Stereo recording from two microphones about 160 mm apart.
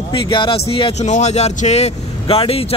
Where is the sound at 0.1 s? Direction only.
30° left (ahead or behind).